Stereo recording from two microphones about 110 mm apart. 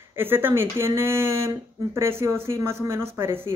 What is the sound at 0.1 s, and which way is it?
Speech, 20° right (ahead or behind).